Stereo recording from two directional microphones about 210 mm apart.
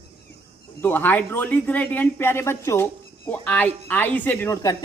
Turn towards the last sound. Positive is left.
turn(degrees=15)  # may be behind; listen again after turning